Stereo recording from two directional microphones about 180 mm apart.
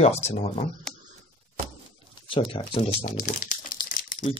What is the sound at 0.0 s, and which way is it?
Speech, 40° left (ahead or behind).